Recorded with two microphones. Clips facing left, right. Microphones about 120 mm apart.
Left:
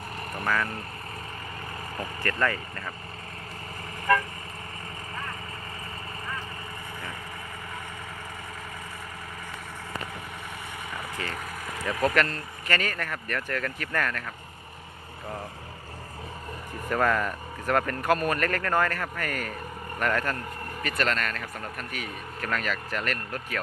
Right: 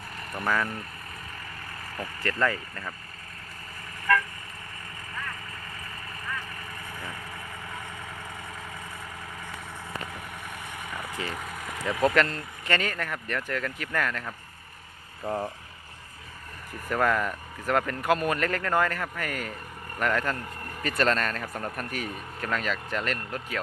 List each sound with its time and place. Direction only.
0.4 s speech: 5° right (ahead or behind)
2.2 s speech: 15° right (ahead or behind)
10.9 s a sound: 10° right (ahead or behind)
11.3 s vehicle: 5° right (ahead or behind)
12.6 s speech: 20° right (ahead or behind)
15.3 s speech: 30° right (ahead or behind)
16.9 s speech: 5° right (ahead or behind)
21.0 s speech: 30° right (ahead or behind)
22.4 s speech: 20° right (ahead or behind)